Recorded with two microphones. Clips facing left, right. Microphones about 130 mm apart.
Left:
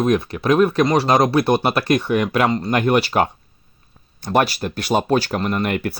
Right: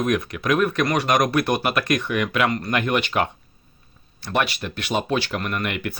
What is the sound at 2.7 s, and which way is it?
Speech, 35° left (ahead or behind).